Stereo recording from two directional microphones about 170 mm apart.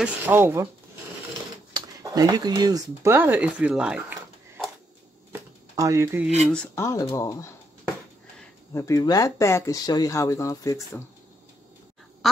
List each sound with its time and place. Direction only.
0.0 s speech: 10° right (ahead or behind)
1.7 s speech: 20° right (ahead or behind); by 4.6 s 5° right (ahead or behind)
5.3 s shuffling cards: 20° right (ahead or behind)
6.4 s speech: 5° left (ahead or behind)
8.7 s speech: 20° left (ahead or behind)